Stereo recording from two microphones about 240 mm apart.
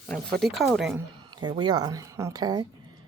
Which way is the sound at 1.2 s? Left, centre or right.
Centre.